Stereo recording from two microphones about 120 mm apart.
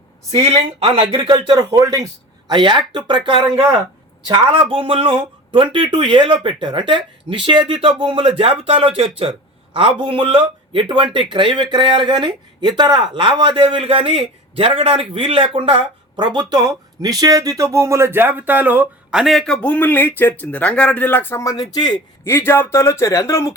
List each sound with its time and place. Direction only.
0.4 s speech: 55° right (ahead or behind)
1.5 s speech: 30° right (ahead or behind)
2.5 s speech: 40° right (ahead or behind); by 18.9 s 15° right (ahead or behind)
19.1 s speech: centre (ahead or behind)
19.6 s speech: 15° left (ahead or behind)
21.5 s speech: 35° left (ahead or behind)
22.2 s speech: 20° left (ahead or behind)